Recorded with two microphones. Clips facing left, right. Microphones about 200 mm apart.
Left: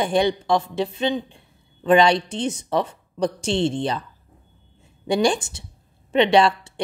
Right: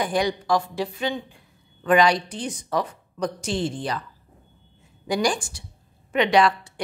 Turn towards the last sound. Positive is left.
turn(degrees=25)  # may be behind; listen again after turning